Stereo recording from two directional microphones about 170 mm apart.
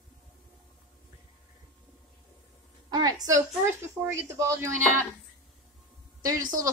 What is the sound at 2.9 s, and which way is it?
A woman's voice, 20° right (ahead or behind).